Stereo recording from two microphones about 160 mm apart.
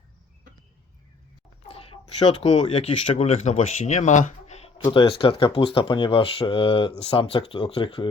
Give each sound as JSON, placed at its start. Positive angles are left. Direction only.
{"t": 1.6, "sound": "speech", "side_deg": 35}
{"t": 4.8, "sound": "speech", "side_deg": 30}